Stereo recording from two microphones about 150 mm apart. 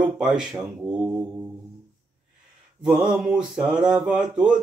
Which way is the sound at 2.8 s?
10° right (ahead or behind).